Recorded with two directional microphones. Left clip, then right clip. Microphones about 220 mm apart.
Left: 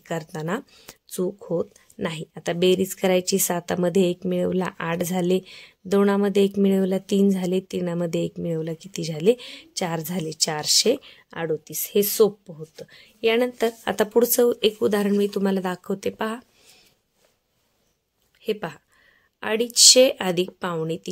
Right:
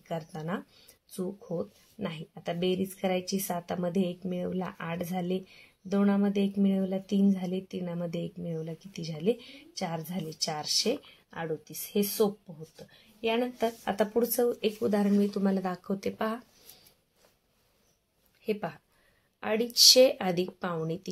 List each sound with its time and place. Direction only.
0.1 s speech: 45° left (ahead or behind); by 16.4 s 30° left (ahead or behind)
18.4 s speech: 30° left (ahead or behind)